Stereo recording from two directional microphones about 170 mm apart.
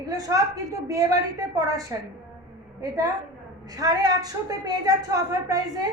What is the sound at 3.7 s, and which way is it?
A woman's voice, 20° right (ahead or behind).